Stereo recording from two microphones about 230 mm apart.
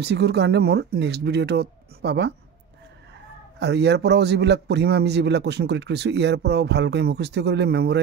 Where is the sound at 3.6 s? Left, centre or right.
Right.